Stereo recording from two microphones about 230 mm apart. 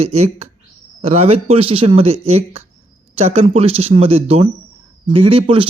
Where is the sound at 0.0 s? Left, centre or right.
Right.